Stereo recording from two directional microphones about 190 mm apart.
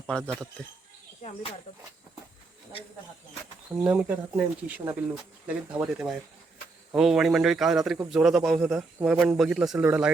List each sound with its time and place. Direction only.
0.1 s a man's voice: centre (ahead or behind)
1.2 s speech: 30° left (ahead or behind)
3.8 s a man's voice: 10° right (ahead or behind)